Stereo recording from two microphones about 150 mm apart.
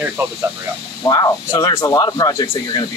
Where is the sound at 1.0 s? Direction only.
25° left (ahead or behind).